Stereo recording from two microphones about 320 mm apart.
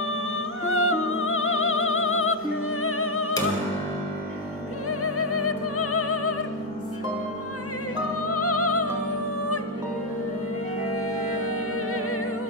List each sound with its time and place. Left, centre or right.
0.7 s music: left
4.8 s music: left
8.3 s music: left
11.4 s music: left